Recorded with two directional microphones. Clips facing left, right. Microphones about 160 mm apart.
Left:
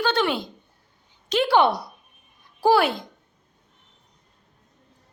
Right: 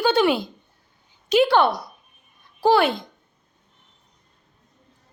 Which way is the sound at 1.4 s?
15° left (ahead or behind).